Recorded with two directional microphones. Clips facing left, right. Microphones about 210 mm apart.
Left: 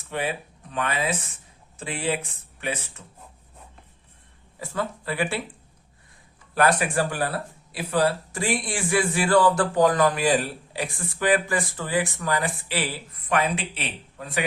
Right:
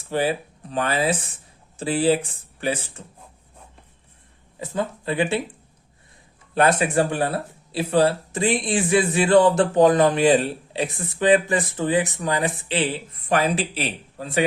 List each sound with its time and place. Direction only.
0.0 s speech: 35° right (ahead or behind)
4.6 s speech: 20° right (ahead or behind)
6.5 s speech: 25° right (ahead or behind)
13.3 s speech: 35° right (ahead or behind)